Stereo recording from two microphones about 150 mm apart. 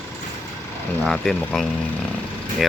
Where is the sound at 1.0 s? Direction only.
5° left (ahead or behind).